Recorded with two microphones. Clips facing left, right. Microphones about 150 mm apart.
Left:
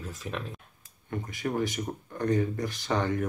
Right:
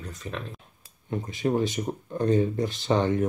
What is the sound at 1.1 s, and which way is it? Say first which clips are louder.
Speech: right 6 dB; 25° right (ahead or behind).